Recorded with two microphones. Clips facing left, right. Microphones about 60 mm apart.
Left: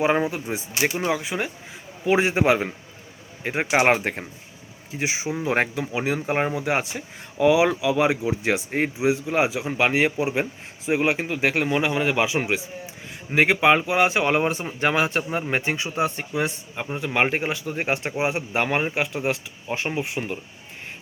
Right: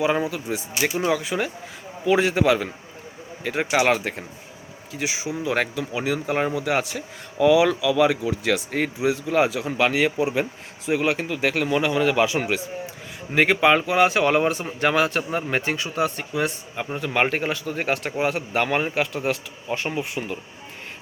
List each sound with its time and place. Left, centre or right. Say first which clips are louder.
0.0 s speech: left 1 dB; left
1.0 s speech: right 2 dB; centre
16.9 s speech: even; centre; by 20.4 s left